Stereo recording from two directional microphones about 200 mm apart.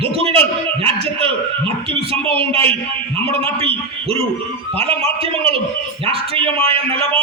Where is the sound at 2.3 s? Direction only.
30° right (ahead or behind).